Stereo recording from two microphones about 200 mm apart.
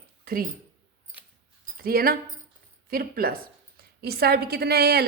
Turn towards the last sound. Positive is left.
turn(degrees=-55)  # may be behind; listen again after turning